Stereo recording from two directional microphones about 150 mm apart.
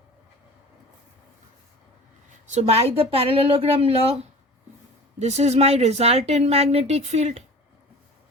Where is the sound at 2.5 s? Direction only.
45° right (ahead or behind).